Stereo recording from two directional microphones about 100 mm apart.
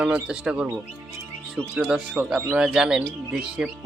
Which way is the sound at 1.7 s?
5° right (ahead or behind).